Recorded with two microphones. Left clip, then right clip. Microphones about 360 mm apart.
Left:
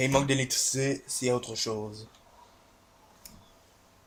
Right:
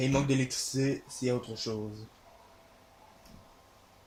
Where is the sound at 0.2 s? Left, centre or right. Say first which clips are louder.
Left 3 dB; left.